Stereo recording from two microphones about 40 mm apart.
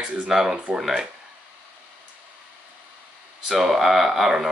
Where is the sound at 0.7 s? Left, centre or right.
Right.